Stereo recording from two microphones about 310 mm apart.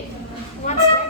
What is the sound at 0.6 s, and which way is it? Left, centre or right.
Speech, left.